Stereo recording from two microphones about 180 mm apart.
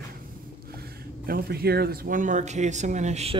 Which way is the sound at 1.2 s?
60° right (ahead or behind).